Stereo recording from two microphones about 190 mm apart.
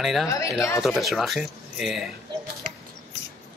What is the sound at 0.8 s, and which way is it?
Speech, centre (ahead or behind).